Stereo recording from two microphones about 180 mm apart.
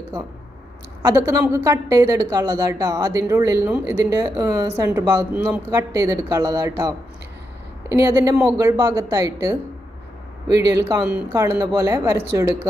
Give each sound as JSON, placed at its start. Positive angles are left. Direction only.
{"t": 1.0, "sound": "a woman's voice", "side_deg": -20}
{"t": 7.9, "sound": "speech", "side_deg": -15}